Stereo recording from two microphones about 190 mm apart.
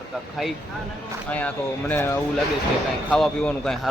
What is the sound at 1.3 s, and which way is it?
Speech, 5° left (ahead or behind).